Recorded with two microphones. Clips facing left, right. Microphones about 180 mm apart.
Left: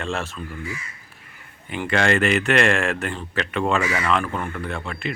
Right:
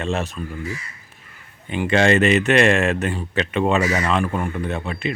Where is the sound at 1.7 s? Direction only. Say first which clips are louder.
Right 4 dB; 20° right (ahead or behind).